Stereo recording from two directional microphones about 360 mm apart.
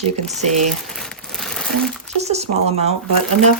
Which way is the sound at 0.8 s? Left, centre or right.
Centre.